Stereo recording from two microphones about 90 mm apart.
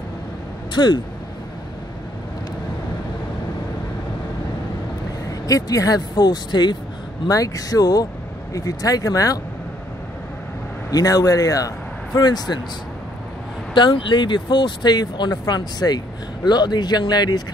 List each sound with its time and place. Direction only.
0.7 s speech: 55° left (ahead or behind)
5.5 s speech: 40° left (ahead or behind)
7.2 s speech: 40° left (ahead or behind)
10.9 s speech: 45° left (ahead or behind)
13.7 s speech: 60° left (ahead or behind)